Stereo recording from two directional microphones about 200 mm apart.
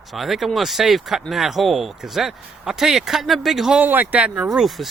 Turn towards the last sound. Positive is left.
turn(degrees=0)  # may be behind; listen again after turning